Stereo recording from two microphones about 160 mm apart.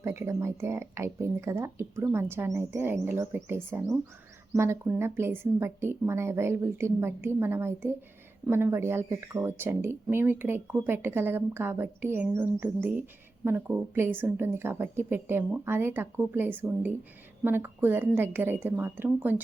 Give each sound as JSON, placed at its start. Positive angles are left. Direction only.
{"t": 0.0, "sound": "speech", "side_deg": -15}